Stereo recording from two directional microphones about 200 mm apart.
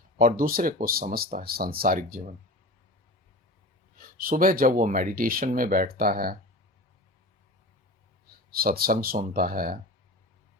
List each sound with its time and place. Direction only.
0.2 s speech: 45° right (ahead or behind)
3.9 s speech: 45° right (ahead or behind)
8.5 s speech: 50° right (ahead or behind)